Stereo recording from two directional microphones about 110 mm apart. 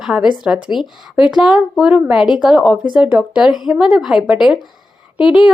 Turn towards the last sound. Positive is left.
turn(degrees=-5)  # may be behind; listen again after turning